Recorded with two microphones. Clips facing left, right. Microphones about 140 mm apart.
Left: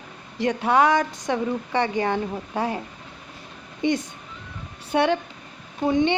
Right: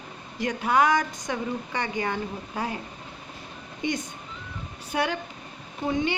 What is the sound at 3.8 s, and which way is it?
A woman's voice, 30° left (ahead or behind).